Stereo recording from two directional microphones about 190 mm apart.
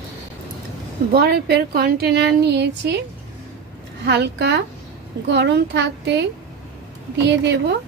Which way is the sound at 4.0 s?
65° right (ahead or behind).